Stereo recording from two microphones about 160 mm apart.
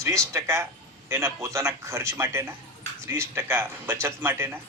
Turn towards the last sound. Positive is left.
turn(degrees=-15)  # may be behind; listen again after turning